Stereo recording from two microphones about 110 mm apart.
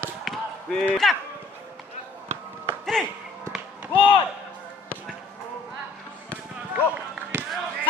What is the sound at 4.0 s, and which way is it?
Speech, 50° left (ahead or behind).